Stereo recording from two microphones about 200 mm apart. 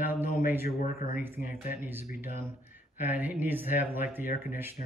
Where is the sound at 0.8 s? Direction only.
45° left (ahead or behind).